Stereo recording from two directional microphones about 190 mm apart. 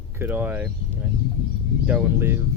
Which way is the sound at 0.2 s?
10° right (ahead or behind).